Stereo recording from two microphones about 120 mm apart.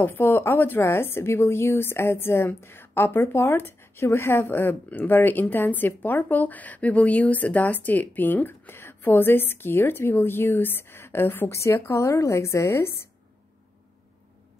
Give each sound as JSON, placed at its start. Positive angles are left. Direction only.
{"t": 0.0, "sound": "a woman's voice", "side_deg": 15}